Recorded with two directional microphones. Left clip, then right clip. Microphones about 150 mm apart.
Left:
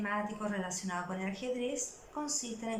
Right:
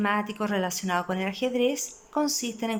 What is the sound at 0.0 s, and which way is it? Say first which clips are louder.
Speech: right 9 dB; 60° right (ahead or behind).